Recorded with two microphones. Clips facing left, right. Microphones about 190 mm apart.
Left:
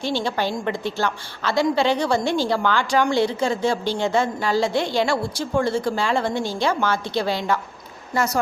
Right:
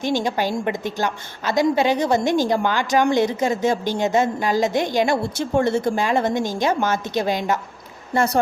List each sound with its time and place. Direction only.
0.0 s a woman's voice: 15° right (ahead or behind)
8.1 s speech: 30° right (ahead or behind)